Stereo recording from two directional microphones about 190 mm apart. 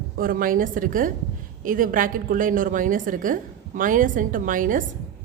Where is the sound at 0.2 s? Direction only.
50° right (ahead or behind).